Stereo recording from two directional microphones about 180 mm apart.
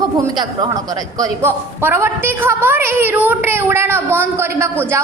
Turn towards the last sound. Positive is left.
turn(degrees=-15)  # may be behind; listen again after turning